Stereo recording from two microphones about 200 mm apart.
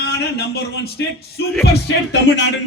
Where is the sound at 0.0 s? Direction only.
55° left (ahead or behind).